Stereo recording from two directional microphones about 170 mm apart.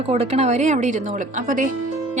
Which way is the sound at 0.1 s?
40° right (ahead or behind).